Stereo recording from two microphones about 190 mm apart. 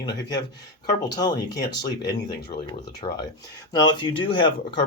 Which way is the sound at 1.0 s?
20° left (ahead or behind).